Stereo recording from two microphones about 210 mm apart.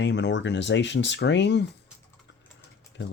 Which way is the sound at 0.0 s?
55° left (ahead or behind).